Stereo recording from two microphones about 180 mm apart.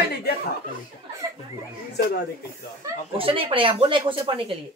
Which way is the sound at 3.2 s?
30° right (ahead or behind).